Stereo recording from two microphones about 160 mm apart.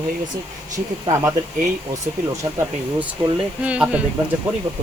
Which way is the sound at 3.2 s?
25° right (ahead or behind).